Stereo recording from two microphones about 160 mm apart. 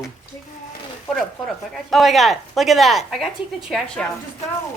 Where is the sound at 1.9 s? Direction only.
Centre (ahead or behind).